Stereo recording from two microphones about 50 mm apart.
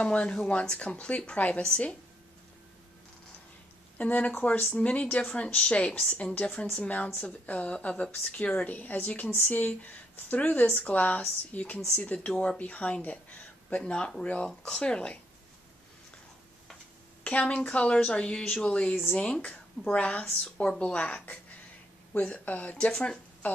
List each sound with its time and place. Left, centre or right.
0.0 s speech: left
4.0 s speech: left
9.3 s speech: left
17.2 s a woman's voice: left
20.4 s speech: centre
22.8 s speech: left